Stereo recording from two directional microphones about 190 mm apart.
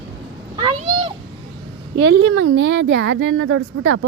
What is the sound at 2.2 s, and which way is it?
Speech, 90° right.